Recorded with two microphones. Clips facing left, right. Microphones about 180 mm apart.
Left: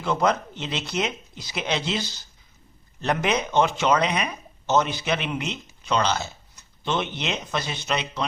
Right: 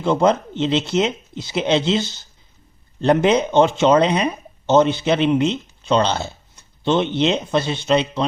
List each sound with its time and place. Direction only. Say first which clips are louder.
0.0 s speech: right 6 dB; 25° right (ahead or behind)